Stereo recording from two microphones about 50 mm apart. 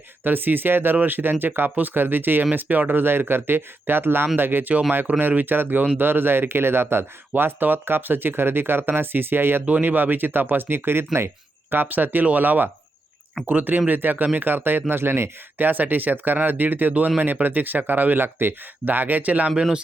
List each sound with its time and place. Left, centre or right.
0.3 s speech: right
11.7 s speech: right